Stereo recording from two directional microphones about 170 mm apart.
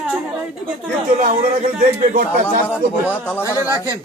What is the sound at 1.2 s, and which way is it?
Speech, 45° right (ahead or behind).